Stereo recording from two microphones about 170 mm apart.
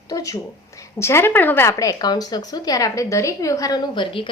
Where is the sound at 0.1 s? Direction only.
20° left (ahead or behind).